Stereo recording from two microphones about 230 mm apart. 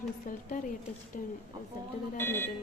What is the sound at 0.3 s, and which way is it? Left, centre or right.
Speech, left.